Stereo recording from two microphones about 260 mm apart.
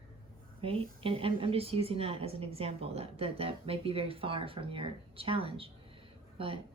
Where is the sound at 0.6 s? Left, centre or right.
Right.